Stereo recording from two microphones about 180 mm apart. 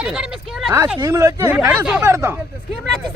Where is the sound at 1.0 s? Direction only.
15° right (ahead or behind).